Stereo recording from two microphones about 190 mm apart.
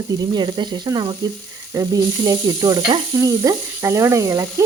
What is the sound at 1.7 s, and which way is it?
Sizzle, 20° right (ahead or behind).